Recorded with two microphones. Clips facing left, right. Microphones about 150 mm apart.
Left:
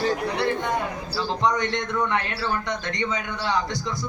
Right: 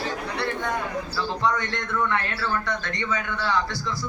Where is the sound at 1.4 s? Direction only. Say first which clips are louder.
Left 3 dB; 20° left (ahead or behind).